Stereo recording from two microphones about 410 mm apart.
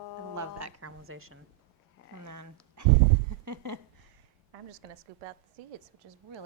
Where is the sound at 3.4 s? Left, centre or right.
Right.